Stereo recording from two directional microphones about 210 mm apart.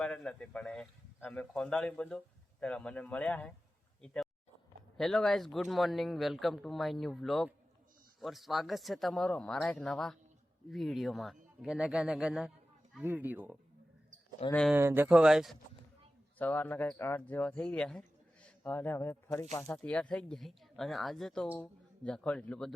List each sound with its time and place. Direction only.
0.0 s speech: 5° left (ahead or behind)
14.5 s speech: 5° left (ahead or behind)
14.8 s speech: 10° right (ahead or behind)
16.4 s speech: 10° left (ahead or behind)